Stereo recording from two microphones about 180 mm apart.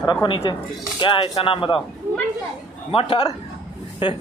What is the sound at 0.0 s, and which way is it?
Speech, 25° left (ahead or behind).